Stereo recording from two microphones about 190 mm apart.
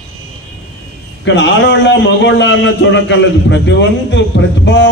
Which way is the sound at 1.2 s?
70° left (ahead or behind).